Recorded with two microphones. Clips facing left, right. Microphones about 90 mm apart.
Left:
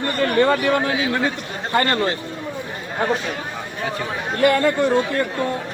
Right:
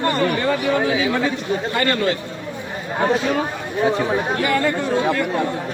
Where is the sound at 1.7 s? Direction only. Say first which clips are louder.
Left 3 dB; 35° left (ahead or behind).